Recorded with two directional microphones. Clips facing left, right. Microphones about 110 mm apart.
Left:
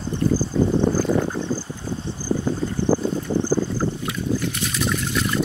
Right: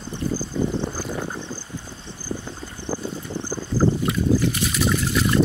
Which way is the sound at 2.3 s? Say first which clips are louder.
Left 10 dB; 35° left (ahead or behind).